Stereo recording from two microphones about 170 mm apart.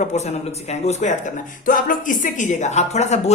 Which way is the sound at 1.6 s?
50° left (ahead or behind).